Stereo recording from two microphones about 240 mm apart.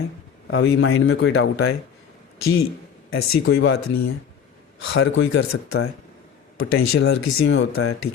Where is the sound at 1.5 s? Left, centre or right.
Left.